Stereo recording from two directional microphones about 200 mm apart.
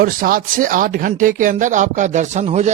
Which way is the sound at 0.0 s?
45° right (ahead or behind).